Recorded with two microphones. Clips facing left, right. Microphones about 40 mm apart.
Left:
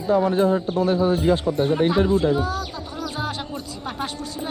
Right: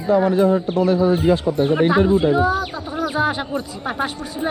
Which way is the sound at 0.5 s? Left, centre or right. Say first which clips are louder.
Right 3 dB; right.